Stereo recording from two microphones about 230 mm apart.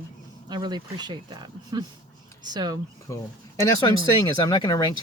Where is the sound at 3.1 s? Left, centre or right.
Centre.